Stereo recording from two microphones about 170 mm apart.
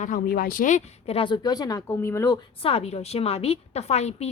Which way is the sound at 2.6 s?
35° left (ahead or behind).